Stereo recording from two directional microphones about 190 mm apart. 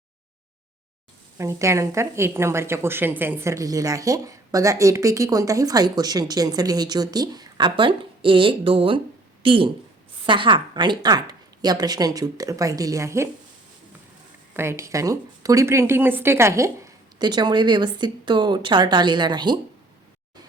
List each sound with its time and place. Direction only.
1.4 s a woman's voice: 15° right (ahead or behind)
14.5 s speech: 15° right (ahead or behind)